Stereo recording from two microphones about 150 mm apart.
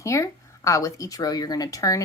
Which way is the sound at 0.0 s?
20° left (ahead or behind).